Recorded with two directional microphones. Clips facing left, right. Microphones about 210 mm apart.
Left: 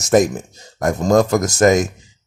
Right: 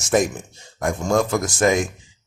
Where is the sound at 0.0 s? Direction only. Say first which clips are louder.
Left 5 dB; 40° left (ahead or behind).